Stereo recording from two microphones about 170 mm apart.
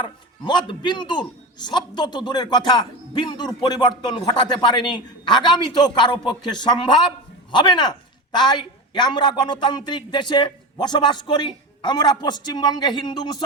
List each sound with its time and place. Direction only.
0.0 s a man's voice: 25° left (ahead or behind)